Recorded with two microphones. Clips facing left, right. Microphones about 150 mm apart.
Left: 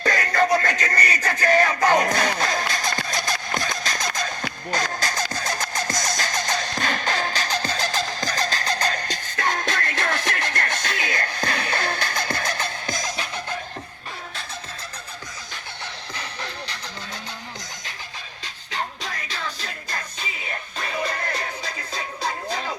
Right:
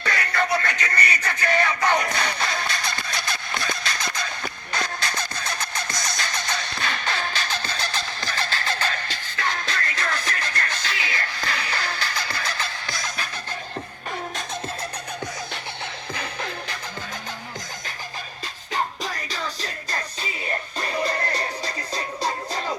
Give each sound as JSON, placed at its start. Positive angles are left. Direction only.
{"t": 0.0, "sound": "music", "side_deg": 40}
{"t": 2.4, "sound": "a sound", "side_deg": 45}
{"t": 4.7, "sound": "music", "side_deg": 40}
{"t": 12.5, "sound": "music", "side_deg": 20}
{"t": 16.1, "sound": "music", "side_deg": -55}
{"t": 18.7, "sound": "music", "side_deg": -40}